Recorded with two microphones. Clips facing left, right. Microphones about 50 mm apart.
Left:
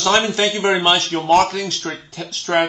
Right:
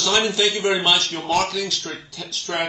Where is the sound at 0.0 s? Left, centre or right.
Left.